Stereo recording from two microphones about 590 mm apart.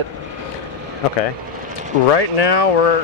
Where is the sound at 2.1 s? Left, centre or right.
Left.